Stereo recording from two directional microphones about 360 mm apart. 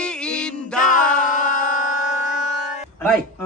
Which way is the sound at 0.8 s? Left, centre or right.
Left.